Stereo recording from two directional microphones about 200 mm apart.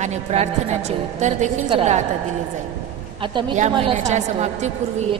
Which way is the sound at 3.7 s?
30° right (ahead or behind).